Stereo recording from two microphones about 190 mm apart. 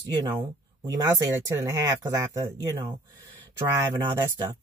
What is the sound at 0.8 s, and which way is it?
Speech, 20° right (ahead or behind).